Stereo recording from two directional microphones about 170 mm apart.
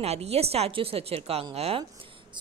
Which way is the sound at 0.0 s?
35° right (ahead or behind).